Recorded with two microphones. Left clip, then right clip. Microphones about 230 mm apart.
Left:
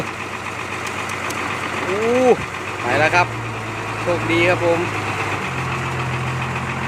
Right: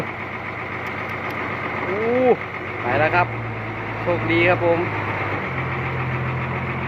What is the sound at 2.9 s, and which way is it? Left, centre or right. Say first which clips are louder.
Vehicle: left 3 dB; centre.